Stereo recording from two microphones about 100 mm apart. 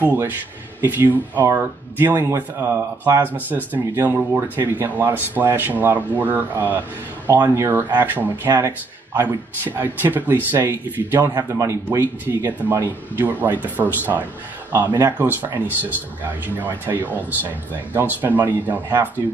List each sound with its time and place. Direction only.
0.0 s a man's voice: 20° right (ahead or behind)